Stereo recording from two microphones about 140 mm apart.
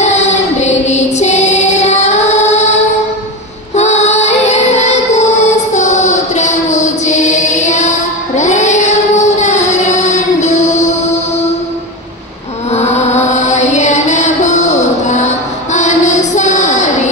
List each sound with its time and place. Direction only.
0.0 s music: 55° left (ahead or behind)
3.7 s music: 55° left (ahead or behind)
8.4 s child singing: 55° left (ahead or behind)
12.7 s chant: 50° left (ahead or behind)